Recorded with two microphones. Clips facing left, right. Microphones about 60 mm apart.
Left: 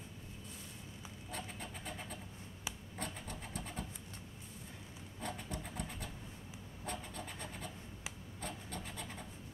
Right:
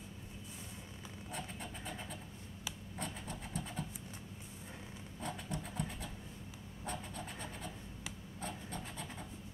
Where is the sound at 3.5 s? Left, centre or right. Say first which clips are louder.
Right 3 dB; left.